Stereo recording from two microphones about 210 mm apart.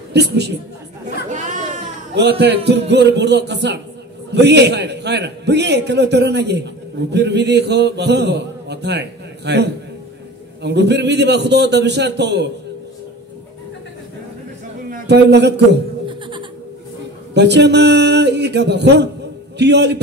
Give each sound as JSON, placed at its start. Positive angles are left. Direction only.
{"t": 0.1, "sound": "a woman's voice", "side_deg": -55}
{"t": 1.3, "sound": "chatter", "side_deg": -35}
{"t": 2.1, "sound": "a man's voice", "side_deg": -50}
{"t": 14.9, "sound": "a man's voice", "side_deg": -55}
{"t": 16.1, "sound": "a sound", "side_deg": -20}
{"t": 17.3, "sound": "a man's voice", "side_deg": -55}